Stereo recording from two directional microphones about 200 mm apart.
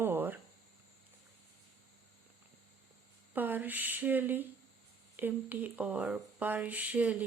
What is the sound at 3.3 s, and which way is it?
Speech, 10° right (ahead or behind).